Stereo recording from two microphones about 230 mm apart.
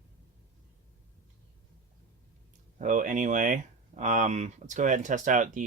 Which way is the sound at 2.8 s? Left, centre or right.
Right.